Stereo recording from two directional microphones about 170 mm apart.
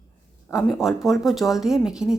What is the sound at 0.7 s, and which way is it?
Speech, centre (ahead or behind).